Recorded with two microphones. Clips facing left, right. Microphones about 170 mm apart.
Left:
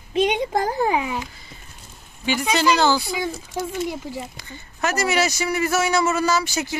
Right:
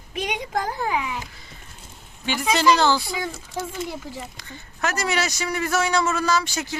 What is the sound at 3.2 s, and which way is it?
Speech, 15° left (ahead or behind).